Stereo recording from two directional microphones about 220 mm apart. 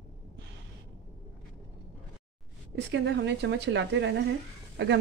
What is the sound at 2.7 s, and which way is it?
Speech, 55° right (ahead or behind).